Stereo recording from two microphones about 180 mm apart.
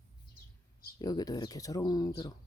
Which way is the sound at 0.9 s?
20° left (ahead or behind).